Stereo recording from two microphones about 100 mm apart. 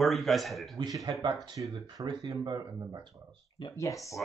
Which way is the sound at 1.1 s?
50° right (ahead or behind).